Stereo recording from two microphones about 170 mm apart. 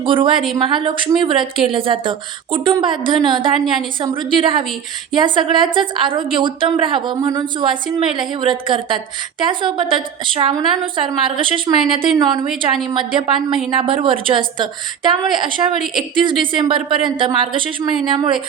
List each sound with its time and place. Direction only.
0.0 s speech: 30° right (ahead or behind)
12.5 s a woman's voice: centre (ahead or behind)
12.9 s speech: 30° right (ahead or behind)